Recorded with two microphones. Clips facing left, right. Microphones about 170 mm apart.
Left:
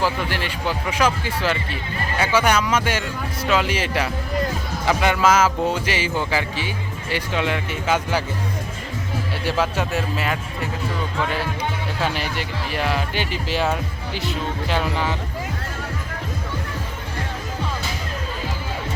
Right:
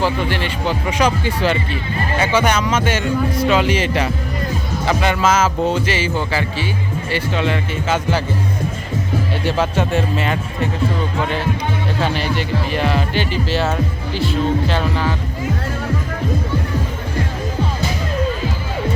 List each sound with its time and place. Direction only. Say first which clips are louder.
0.0 s speech: right 4 dB; 5° left (ahead or behind)
9.4 s speech: right 2 dB; 5° left (ahead or behind)
12.0 s speech: right 3 dB; 5° left (ahead or behind)